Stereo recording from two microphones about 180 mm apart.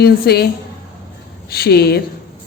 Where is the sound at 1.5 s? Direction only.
60° left (ahead or behind).